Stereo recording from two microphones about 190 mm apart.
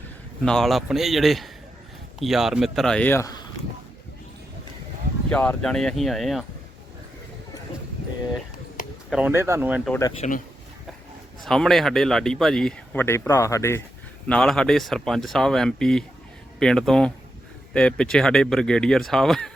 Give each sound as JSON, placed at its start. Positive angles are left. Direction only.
{"t": 0.4, "sound": "speech", "side_deg": 0}
{"t": 5.3, "sound": "speech", "side_deg": 10}
{"t": 9.0, "sound": "speech", "side_deg": -5}
{"t": 10.2, "sound": "speech", "side_deg": 40}
{"t": 11.4, "sound": "speech", "side_deg": 0}